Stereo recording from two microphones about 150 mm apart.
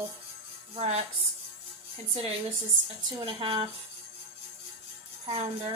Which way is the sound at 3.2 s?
35° right (ahead or behind).